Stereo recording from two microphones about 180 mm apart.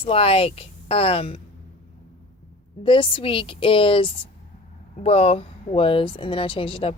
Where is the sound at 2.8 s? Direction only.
30° left (ahead or behind).